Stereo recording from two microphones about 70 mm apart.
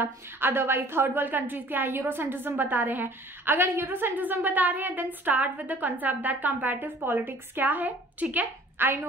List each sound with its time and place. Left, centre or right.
0.0 s a woman's voice: right